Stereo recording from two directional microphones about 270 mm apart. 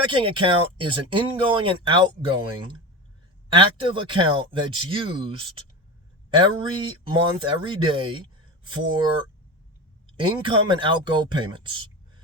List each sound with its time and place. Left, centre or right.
0.0 s speech: centre
3.5 s speech: centre
6.3 s speech: centre